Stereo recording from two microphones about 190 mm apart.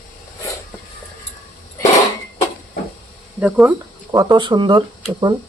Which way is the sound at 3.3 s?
10° right (ahead or behind).